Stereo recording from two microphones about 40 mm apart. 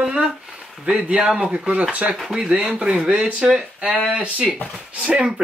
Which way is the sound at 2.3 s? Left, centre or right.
Centre.